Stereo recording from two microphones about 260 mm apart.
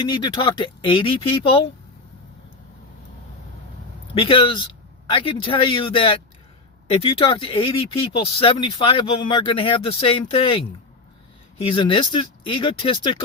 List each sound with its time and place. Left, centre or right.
0.0 s speech: centre
4.1 s speech: centre